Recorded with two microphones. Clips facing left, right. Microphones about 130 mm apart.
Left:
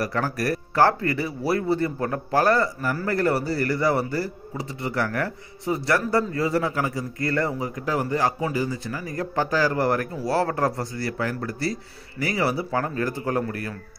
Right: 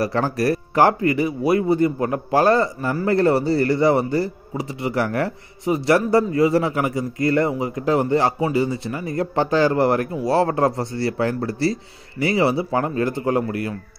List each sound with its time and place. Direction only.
0.0 s speech: 25° right (ahead or behind)